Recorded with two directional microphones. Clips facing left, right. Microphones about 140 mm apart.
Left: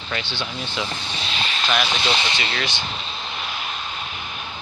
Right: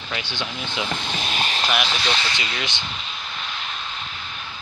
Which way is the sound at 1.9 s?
15° left (ahead or behind).